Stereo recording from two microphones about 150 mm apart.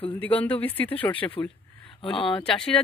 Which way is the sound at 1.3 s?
35° left (ahead or behind).